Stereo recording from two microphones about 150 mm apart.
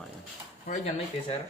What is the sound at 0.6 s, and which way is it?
Speech, 50° left (ahead or behind).